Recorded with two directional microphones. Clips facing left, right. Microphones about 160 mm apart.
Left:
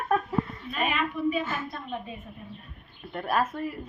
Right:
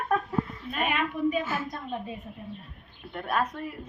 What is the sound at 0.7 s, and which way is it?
Speech, 45° right (ahead or behind).